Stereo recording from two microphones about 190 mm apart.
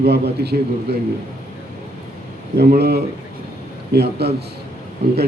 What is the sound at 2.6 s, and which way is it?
A man's voice, 60° right (ahead or behind).